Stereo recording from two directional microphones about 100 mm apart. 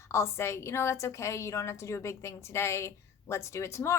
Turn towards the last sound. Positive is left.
turn(degrees=25)  # may be behind; listen again after turning